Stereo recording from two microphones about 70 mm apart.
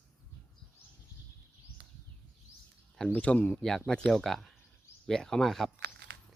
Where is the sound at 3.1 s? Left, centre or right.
Centre.